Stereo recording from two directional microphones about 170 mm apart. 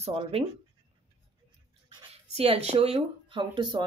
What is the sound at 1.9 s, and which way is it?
Speech, 30° right (ahead or behind).